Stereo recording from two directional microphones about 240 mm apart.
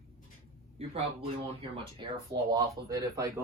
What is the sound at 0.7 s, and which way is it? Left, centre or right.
Speech, right.